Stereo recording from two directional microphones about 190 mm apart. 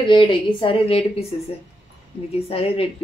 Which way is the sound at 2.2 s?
30° left (ahead or behind).